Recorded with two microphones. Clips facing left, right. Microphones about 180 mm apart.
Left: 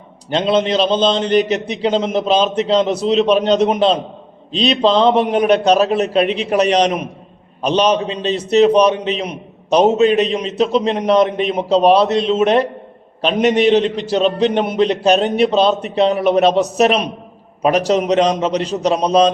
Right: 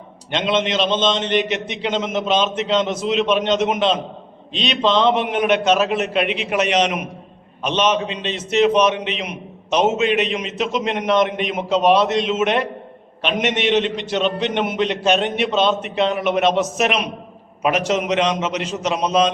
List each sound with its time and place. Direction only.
0.3 s a man's voice: 35° left (ahead or behind)